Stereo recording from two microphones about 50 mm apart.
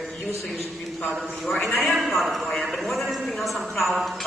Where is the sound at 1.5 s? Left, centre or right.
Left.